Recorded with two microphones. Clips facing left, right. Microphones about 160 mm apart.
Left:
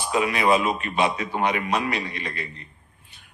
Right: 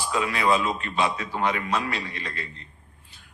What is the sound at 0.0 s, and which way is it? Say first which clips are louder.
A man's voice: left 3 dB; 15° left (ahead or behind).